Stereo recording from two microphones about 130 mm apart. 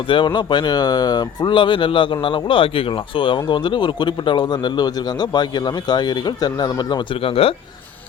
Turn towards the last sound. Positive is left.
turn(degrees=35)  # may be behind; listen again after turning